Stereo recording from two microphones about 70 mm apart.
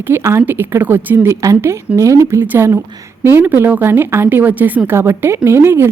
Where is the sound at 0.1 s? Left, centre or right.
Right.